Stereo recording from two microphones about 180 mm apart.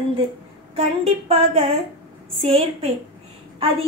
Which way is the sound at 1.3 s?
35° right (ahead or behind).